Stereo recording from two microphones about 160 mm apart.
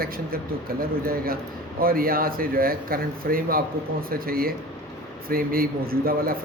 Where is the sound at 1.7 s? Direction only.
65° right (ahead or behind).